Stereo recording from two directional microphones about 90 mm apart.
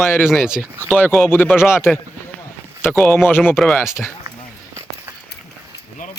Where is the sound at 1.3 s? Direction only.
20° left (ahead or behind).